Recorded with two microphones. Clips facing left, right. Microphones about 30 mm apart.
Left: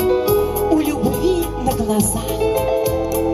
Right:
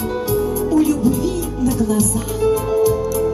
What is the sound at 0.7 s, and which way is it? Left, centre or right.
Music, left.